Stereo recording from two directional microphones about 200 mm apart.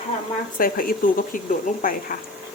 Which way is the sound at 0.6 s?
45° left (ahead or behind).